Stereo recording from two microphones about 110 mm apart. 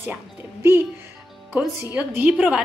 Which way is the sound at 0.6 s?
20° right (ahead or behind).